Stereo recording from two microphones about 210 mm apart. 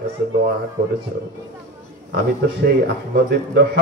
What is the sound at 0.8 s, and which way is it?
Speech, 45° right (ahead or behind).